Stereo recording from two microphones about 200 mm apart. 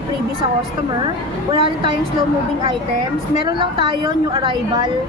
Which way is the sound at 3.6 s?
25° right (ahead or behind).